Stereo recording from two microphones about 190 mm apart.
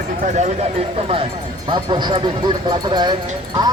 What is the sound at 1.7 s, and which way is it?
Music, 25° right (ahead or behind).